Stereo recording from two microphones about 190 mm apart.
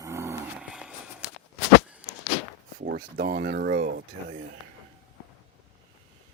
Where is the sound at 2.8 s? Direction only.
55° right (ahead or behind).